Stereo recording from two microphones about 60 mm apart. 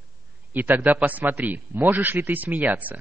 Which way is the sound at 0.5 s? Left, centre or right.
Right.